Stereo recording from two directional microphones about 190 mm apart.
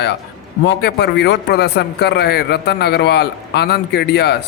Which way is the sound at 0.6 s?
60° left (ahead or behind).